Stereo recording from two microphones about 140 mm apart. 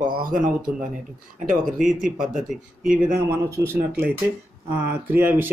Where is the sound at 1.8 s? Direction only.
5° right (ahead or behind).